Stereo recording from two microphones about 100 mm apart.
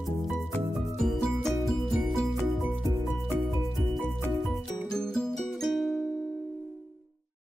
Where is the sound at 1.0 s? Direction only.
5° left (ahead or behind).